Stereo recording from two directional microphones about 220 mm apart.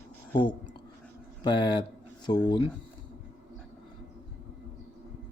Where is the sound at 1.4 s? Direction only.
20° left (ahead or behind).